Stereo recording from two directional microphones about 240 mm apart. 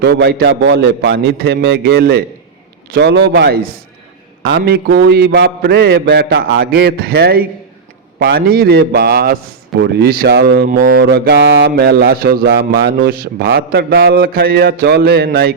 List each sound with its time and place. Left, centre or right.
0.0 s a man's voice: right